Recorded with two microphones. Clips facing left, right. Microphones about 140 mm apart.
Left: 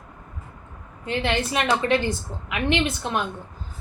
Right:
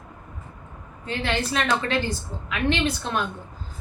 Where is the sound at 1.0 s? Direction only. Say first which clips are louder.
Left 2 dB; 20° left (ahead or behind).